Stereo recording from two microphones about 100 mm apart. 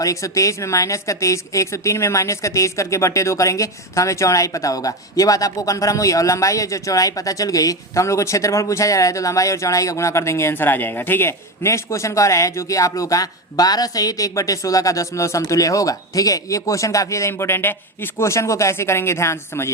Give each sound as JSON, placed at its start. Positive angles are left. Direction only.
{"t": 0.0, "sound": "a woman's voice", "side_deg": 35}